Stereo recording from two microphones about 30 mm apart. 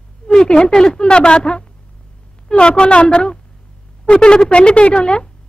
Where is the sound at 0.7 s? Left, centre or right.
Centre.